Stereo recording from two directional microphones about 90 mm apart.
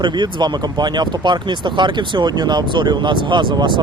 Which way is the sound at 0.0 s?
60° right (ahead or behind).